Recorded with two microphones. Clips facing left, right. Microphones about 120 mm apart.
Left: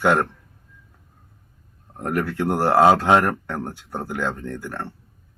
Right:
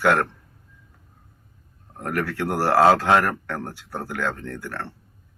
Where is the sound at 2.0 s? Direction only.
20° left (ahead or behind).